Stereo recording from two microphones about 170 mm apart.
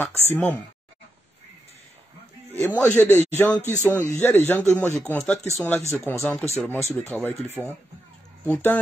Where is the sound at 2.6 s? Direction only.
10° left (ahead or behind).